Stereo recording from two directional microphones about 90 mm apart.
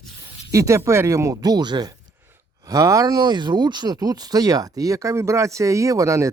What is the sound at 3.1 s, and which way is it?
Speech, 55° right (ahead or behind).